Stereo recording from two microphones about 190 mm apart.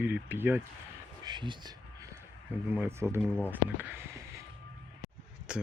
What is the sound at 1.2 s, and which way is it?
Speech, 25° right (ahead or behind).